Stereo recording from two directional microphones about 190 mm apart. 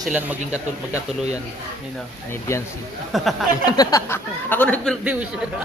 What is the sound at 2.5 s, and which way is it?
Speech, 15° left (ahead or behind).